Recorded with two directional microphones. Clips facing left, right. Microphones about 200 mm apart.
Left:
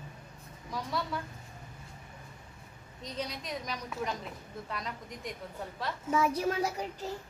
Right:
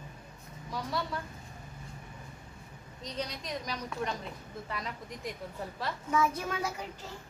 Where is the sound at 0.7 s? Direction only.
Centre (ahead or behind).